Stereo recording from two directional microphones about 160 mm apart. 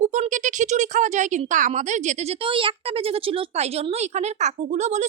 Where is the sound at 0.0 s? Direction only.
50° right (ahead or behind).